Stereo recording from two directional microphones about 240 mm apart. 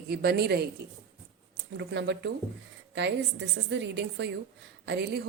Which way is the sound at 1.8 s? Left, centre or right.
Right.